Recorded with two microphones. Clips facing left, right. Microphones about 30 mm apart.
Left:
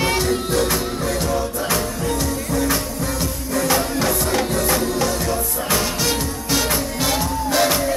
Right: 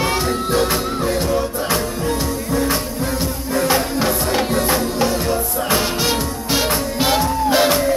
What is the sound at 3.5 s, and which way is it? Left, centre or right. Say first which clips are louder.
Music: right 2 dB; right.